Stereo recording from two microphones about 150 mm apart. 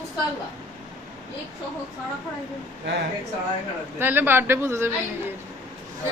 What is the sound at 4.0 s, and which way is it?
Speech, 15° right (ahead or behind).